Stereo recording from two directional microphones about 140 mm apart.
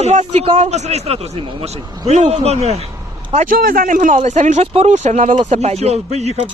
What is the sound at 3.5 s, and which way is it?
Speech, 85° right.